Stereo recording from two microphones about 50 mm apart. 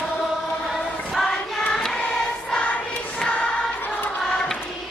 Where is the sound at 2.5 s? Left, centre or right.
Left.